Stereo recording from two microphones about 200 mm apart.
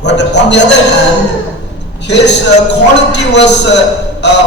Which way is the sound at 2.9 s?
60° left (ahead or behind).